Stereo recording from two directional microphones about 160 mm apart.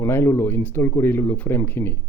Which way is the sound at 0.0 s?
15° left (ahead or behind).